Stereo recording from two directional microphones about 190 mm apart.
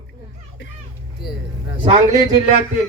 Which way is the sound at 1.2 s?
55° left (ahead or behind).